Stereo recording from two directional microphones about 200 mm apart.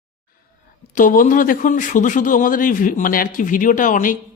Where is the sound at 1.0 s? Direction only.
40° left (ahead or behind).